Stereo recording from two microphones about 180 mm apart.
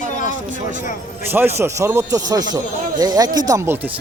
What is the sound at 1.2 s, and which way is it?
A man's voice, 10° right (ahead or behind).